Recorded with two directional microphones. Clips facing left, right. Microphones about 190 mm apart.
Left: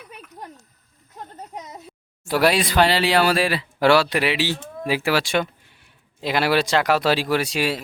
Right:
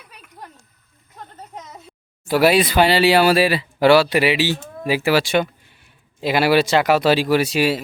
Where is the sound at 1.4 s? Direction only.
15° left (ahead or behind).